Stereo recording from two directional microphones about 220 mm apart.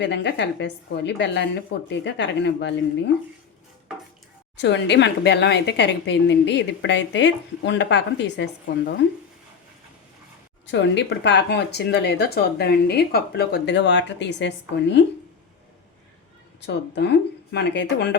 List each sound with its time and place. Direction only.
0.0 s a woman's voice: 55° left (ahead or behind)
4.5 s a woman's voice: 55° left (ahead or behind)
10.7 s a woman's voice: 55° left (ahead or behind)
16.6 s a woman's voice: 50° left (ahead or behind)